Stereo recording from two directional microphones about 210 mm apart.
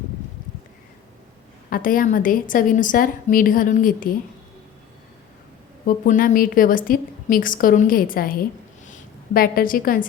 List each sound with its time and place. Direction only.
1.7 s a woman's voice: 40° left (ahead or behind)
5.8 s a woman's voice: 40° left (ahead or behind)